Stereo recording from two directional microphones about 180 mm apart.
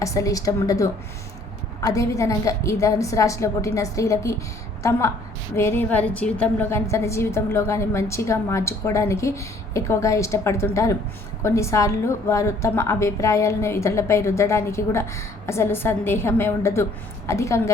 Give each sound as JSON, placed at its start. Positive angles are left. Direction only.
{"t": 0.0, "sound": "a woman's voice", "side_deg": 20}